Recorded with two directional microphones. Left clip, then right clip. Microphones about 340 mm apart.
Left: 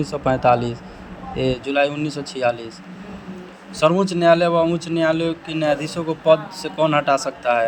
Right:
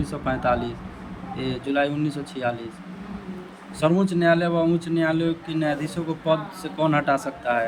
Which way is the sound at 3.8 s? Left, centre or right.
Centre.